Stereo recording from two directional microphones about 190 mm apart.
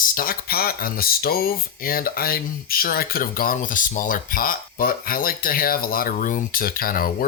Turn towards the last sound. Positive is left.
turn(degrees=50)  # may be behind; listen again after turning